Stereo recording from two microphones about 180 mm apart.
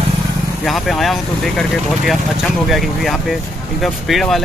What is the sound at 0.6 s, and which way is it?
Speech, centre (ahead or behind).